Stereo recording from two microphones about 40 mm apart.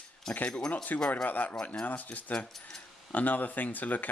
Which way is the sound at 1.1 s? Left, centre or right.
Left.